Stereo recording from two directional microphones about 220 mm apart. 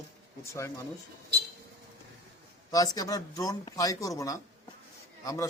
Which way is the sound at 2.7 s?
15° left (ahead or behind).